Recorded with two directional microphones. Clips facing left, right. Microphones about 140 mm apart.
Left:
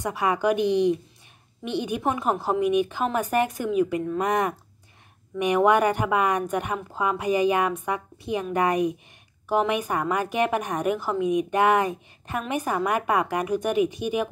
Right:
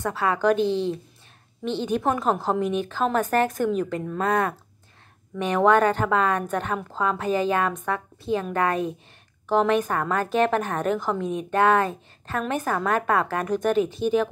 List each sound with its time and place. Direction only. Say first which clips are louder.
0.0 s a woman's voice: right 1 dB; 15° left (ahead or behind)
4.2 s a woman's voice: right 3 dB; 15° left (ahead or behind)